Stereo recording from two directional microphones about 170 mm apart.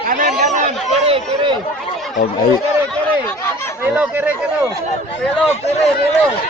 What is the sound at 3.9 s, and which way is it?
Speech, 10° right (ahead or behind).